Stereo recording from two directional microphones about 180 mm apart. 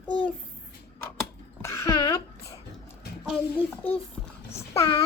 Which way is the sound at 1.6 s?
15° left (ahead or behind).